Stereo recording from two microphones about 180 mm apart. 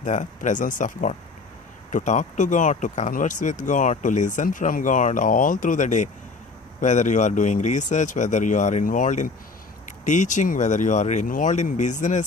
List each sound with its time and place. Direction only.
0.0 s speech: 45° left (ahead or behind)